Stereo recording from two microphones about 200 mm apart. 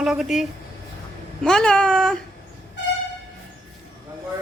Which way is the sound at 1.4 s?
5° left (ahead or behind).